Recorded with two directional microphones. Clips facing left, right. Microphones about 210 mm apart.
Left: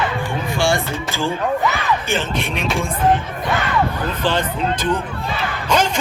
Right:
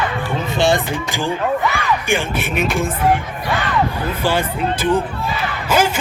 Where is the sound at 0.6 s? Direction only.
20° right (ahead or behind).